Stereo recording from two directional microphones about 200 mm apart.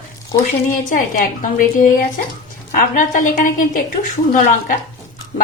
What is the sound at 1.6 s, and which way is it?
A woman's voice, 45° left (ahead or behind).